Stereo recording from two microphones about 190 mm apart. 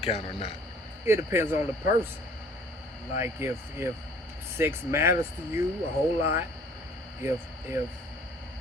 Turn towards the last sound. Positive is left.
turn(degrees=-15)  # may be behind; listen again after turning